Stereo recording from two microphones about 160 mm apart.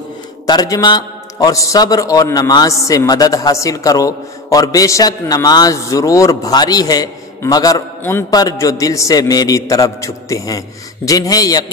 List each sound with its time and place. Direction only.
0.5 s a man's voice: 25° left (ahead or behind)